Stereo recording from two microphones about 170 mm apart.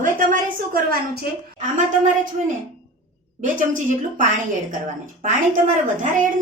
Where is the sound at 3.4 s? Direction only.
50° right (ahead or behind).